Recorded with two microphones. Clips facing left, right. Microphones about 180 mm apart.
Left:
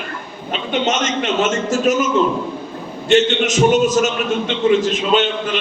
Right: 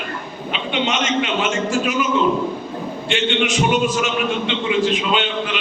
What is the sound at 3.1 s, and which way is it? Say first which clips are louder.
A man's voice: left 6 dB; 40° left (ahead or behind).